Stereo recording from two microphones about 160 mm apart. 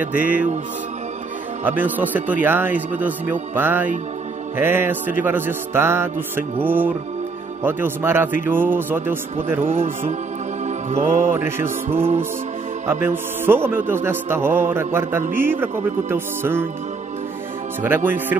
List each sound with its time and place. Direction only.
0.2 s a man's voice: 10° right (ahead or behind)
1.6 s a man's voice: 10° right (ahead or behind)
9.7 s music: 40° right (ahead or behind)
11.3 s a man's voice: 15° right (ahead or behind)
17.8 s a man's voice: 15° right (ahead or behind)